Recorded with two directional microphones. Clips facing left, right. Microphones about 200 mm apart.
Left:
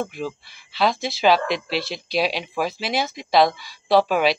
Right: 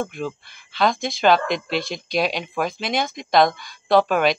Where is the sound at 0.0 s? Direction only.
5° left (ahead or behind).